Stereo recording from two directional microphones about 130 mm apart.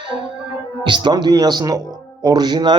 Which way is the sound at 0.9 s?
35° right (ahead or behind).